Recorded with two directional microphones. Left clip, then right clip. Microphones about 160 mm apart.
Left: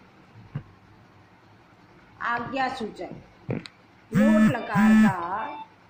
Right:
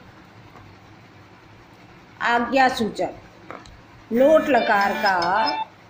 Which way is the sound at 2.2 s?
25° right (ahead or behind).